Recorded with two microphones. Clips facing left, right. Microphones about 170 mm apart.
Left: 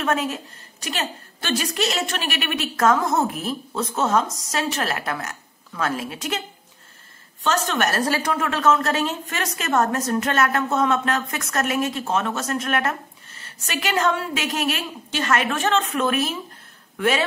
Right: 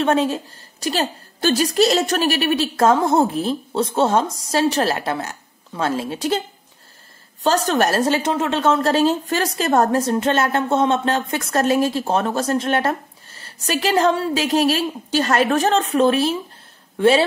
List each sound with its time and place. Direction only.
0.0 s a woman's voice: 30° right (ahead or behind)
7.4 s a woman's voice: 35° right (ahead or behind)